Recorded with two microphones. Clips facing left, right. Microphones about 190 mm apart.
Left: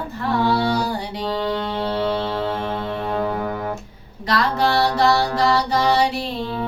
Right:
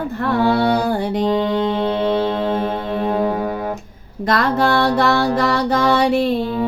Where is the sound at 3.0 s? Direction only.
15° right (ahead or behind).